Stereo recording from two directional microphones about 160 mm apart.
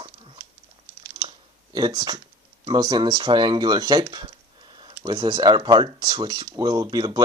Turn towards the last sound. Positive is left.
turn(degrees=-25)  # may be behind; listen again after turning